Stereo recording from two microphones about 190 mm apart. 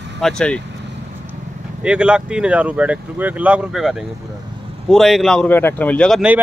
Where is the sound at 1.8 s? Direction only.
5° right (ahead or behind).